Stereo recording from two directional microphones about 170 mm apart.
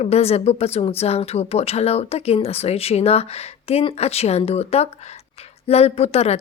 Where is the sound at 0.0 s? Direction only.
35° left (ahead or behind).